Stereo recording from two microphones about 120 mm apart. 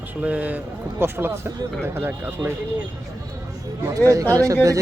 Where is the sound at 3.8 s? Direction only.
25° right (ahead or behind).